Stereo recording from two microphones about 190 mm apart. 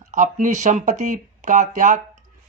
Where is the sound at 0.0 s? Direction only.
40° right (ahead or behind).